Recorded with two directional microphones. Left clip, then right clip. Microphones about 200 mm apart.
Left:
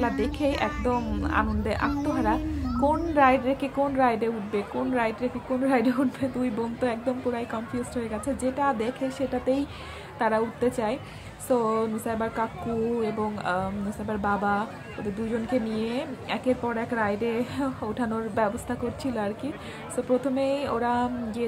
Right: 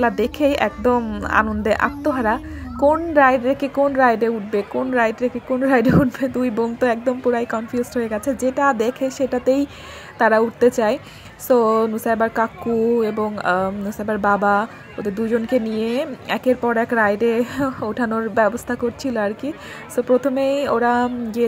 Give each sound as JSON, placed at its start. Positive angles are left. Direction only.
{"t": 0.0, "sound": "a child's voice", "side_deg": -35}